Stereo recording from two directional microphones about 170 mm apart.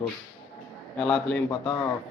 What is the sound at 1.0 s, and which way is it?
Speech, 5° left (ahead or behind).